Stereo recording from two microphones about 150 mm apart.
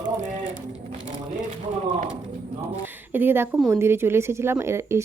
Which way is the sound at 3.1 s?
15° right (ahead or behind).